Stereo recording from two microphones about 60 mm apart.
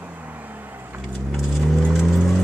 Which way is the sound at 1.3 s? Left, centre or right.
Centre.